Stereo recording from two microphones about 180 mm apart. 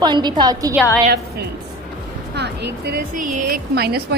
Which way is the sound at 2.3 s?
65° right (ahead or behind).